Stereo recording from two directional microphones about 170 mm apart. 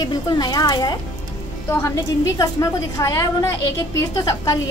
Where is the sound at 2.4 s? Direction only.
20° left (ahead or behind).